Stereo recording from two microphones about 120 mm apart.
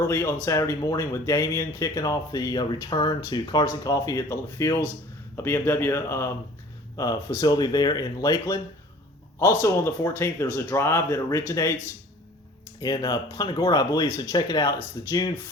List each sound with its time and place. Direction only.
0.0 s speech: 20° left (ahead or behind)
9.4 s speech: 20° left (ahead or behind)
12.8 s speech: 35° left (ahead or behind)